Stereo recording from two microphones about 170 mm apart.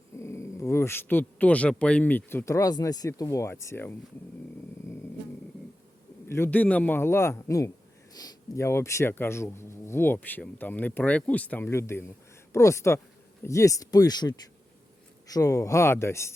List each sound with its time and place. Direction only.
0.2 s speech: 15° left (ahead or behind)
6.2 s speech: 15° left (ahead or behind)